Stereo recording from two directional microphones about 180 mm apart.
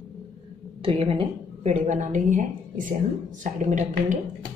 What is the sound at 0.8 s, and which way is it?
A woman's voice, 30° right (ahead or behind).